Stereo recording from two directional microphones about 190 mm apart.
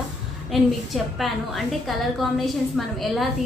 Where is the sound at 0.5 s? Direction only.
Centre (ahead or behind).